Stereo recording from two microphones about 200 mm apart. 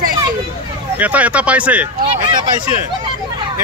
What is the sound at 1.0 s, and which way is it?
Speech, 5° right (ahead or behind).